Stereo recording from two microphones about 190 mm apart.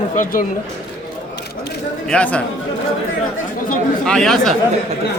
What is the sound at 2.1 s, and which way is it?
Speech, 5° left (ahead or behind).